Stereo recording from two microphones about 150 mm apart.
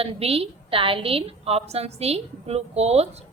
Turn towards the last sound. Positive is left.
turn(degrees=-45)  # may be behind; listen again after turning